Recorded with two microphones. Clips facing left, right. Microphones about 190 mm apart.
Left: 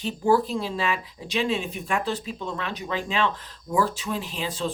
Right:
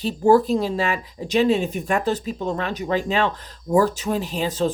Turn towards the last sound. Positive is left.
turn(degrees=-40)  # may be behind; listen again after turning